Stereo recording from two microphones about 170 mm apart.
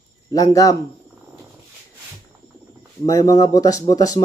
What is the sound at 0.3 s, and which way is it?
Speech, 20° left (ahead or behind).